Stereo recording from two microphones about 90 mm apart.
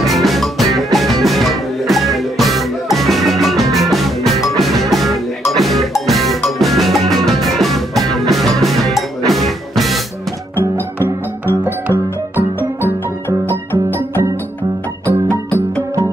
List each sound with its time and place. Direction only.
0.0 s music: centre (ahead or behind)
13.5 s music: 20° left (ahead or behind)